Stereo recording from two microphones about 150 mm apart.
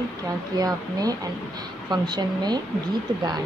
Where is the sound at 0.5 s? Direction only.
25° right (ahead or behind).